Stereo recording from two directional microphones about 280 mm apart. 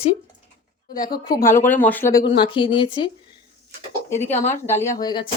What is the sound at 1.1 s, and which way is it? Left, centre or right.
Speech, centre.